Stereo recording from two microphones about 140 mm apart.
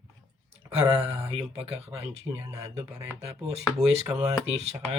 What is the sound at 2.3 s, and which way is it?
Mantra, 25° right (ahead or behind).